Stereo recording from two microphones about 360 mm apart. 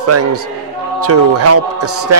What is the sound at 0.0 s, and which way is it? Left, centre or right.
A man's voice, right.